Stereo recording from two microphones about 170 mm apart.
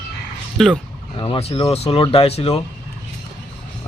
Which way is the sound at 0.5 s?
Centre (ahead or behind).